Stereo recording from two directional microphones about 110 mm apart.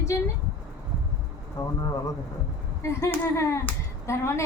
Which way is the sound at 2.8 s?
25° left (ahead or behind).